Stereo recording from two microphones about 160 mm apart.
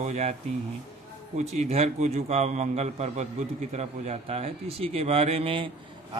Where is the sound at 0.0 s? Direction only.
45° right (ahead or behind).